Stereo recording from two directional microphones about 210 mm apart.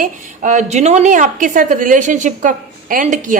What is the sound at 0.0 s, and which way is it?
A woman's voice, 35° right (ahead or behind).